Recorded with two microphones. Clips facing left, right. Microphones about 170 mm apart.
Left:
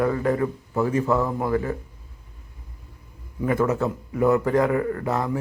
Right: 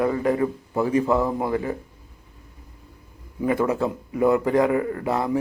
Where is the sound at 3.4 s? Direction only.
20° right (ahead or behind).